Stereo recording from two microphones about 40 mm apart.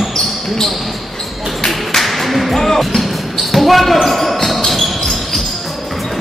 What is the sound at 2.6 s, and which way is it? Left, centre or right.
Basketball bounce, centre.